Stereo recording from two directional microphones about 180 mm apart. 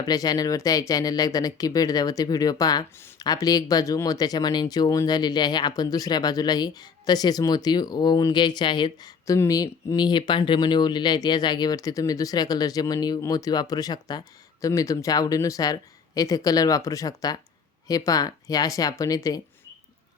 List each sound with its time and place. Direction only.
0.0 s speech: 20° left (ahead or behind)